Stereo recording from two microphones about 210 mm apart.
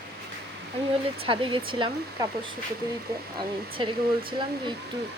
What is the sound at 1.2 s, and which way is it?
A woman's voice, 25° right (ahead or behind).